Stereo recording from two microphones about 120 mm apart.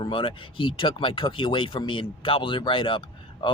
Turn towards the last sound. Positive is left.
turn(degrees=45)  # may be behind; listen again after turning